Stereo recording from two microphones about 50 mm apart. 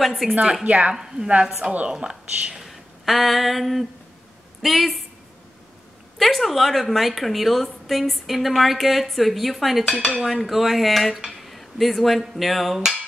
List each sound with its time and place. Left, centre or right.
0.0 s a woman's voice: centre
0.3 s speech: right
0.9 s speech: centre
2.6 s a sound: centre
4.6 s a woman's voice: centre
6.1 s a woman's voice: centre